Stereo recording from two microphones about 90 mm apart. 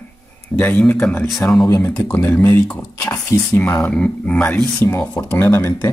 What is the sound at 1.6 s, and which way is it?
Speech, 35° left (ahead or behind).